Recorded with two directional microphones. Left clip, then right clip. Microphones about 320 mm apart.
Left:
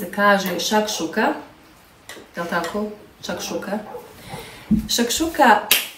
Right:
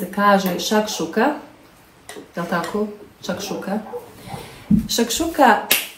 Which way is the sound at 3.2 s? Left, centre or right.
Centre.